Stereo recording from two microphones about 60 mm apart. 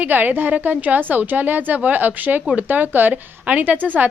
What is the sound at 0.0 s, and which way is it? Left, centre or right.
A woman's voice, right.